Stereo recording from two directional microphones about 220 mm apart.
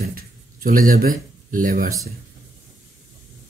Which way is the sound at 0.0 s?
40° right (ahead or behind).